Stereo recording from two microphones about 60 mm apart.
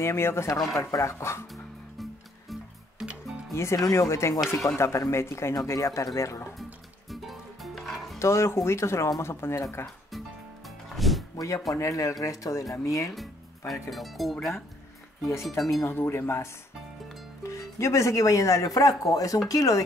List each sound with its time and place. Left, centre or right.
0.0 s speech: left
0.7 s speech: left
3.5 s speech: left
7.1 s music: centre
8.2 s speech: left
10.9 s music: centre
11.3 s speech: left
11.7 s speech: left
13.1 s music: centre
13.8 s speech: centre
15.8 s speech: left
17.4 s speech: left